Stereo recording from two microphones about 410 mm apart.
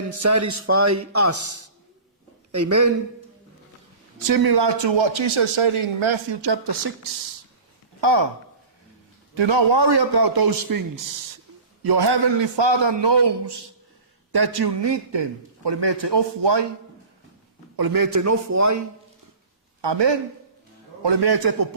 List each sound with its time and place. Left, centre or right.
0.1 s a man's voice: right
4.3 s a man's voice: right
8.0 s a man's voice: right
9.3 s a man's voice: right
11.8 s a man's voice: right
17.7 s a man's voice: right
19.8 s a man's voice: right
21.0 s a man's voice: right